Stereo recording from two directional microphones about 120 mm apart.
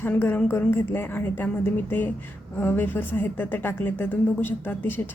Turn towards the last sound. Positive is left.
turn(degrees=15)  # may be behind; listen again after turning